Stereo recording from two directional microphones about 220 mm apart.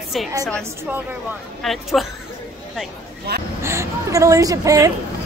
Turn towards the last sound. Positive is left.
turn(degrees=-15)  # may be behind; listen again after turning